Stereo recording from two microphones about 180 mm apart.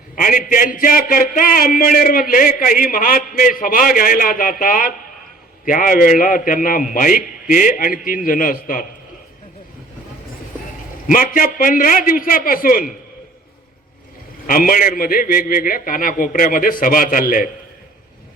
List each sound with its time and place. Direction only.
0.2 s speech: 50° left (ahead or behind)
11.1 s speech: 50° left (ahead or behind)
14.4 s speech: 50° left (ahead or behind)